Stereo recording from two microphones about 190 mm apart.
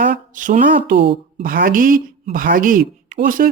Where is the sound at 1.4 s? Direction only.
45° right (ahead or behind).